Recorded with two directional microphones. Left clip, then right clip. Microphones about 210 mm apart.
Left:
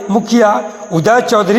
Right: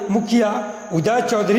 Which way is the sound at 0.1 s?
20° left (ahead or behind).